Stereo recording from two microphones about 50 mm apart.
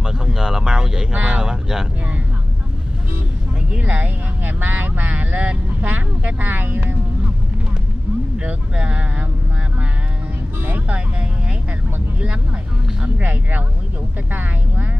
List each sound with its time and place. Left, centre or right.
0.0 s a sound: centre
1.1 s speech: right
1.4 s speech: centre
3.7 s speech: right
4.0 s speech: right
8.4 s speech: right
10.6 s speech: right
13.0 s speech: right